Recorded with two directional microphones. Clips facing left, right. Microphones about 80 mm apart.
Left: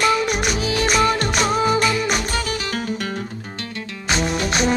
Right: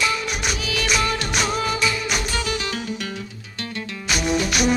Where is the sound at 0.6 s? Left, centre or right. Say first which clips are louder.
Left 5 dB; left.